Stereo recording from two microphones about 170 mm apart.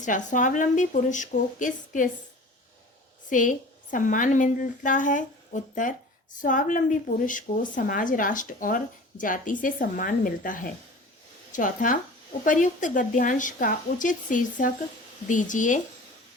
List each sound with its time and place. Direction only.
0.0 s a woman's voice: 45° left (ahead or behind)
3.2 s a woman's voice: 50° left (ahead or behind)